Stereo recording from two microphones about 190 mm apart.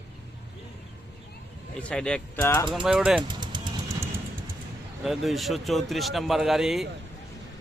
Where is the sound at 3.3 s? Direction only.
25° right (ahead or behind).